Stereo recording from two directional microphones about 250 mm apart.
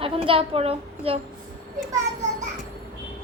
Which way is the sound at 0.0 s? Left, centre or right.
Right.